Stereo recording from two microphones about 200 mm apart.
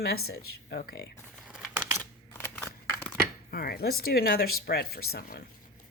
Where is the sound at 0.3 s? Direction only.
55° left (ahead or behind).